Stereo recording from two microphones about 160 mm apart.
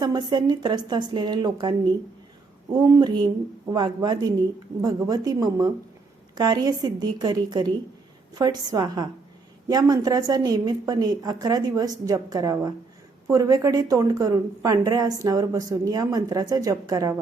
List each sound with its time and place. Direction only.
0.0 s a woman's voice: 25° right (ahead or behind)